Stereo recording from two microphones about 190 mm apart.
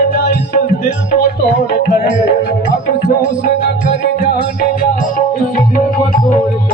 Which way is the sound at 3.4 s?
60° left (ahead or behind).